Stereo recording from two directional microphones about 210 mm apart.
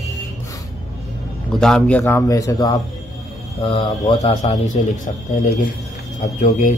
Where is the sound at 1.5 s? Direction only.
5° left (ahead or behind).